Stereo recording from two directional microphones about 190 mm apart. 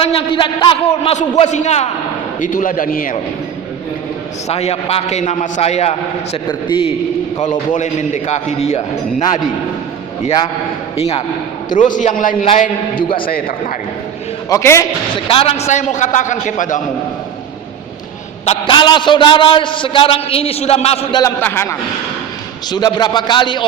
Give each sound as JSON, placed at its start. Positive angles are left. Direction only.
{"t": 0.0, "sound": "a man's voice", "side_deg": 30}
{"t": 4.4, "sound": "a man's voice", "side_deg": 35}
{"t": 7.7, "sound": "a man's voice", "side_deg": 40}
{"t": 10.9, "sound": "a man's voice", "side_deg": 35}
{"t": 11.9, "sound": "a man's voice", "side_deg": 45}
{"t": 13.0, "sound": "a man's voice", "side_deg": 25}
{"t": 13.2, "sound": "a man's voice", "side_deg": 50}
{"t": 14.5, "sound": "a man's voice", "side_deg": 15}
{"t": 15.3, "sound": "a man's voice", "side_deg": 30}
{"t": 18.4, "sound": "a man's voice", "side_deg": 25}
{"t": 21.2, "sound": "a man's voice", "side_deg": 15}